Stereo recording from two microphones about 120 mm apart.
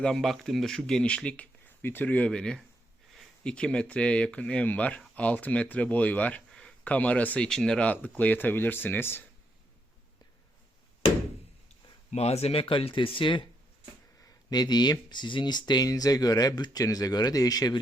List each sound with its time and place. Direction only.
0.0 s speech: centre (ahead or behind); by 9.2 s 20° left (ahead or behind)
12.1 s speech: 65° left (ahead or behind); by 13.5 s 45° left (ahead or behind)
14.2 s speech: 30° left (ahead or behind)